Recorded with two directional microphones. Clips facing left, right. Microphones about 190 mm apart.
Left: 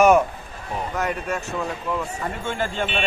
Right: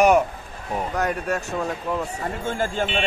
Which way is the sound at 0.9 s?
40° right (ahead or behind).